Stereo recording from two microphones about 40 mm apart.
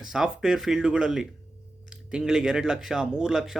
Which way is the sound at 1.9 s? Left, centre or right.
Right.